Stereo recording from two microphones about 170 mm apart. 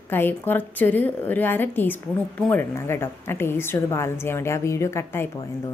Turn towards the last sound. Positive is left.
turn(degrees=15)  # may be behind; listen again after turning